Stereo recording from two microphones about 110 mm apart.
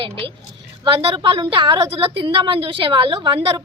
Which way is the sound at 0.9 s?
50° right (ahead or behind).